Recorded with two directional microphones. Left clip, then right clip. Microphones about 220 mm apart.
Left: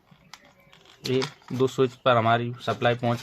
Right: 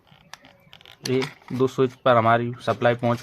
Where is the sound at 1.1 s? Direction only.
10° right (ahead or behind).